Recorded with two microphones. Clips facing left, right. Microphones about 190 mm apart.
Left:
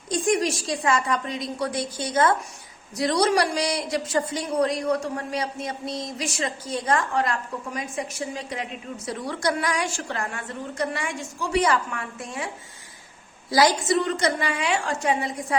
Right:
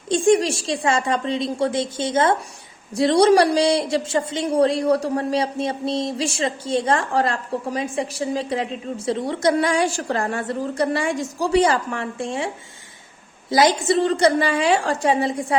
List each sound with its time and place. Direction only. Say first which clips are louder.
0.1 s a woman's voice: right 6 dB; 30° right (ahead or behind)
13.5 s speech: right 3 dB; 20° right (ahead or behind)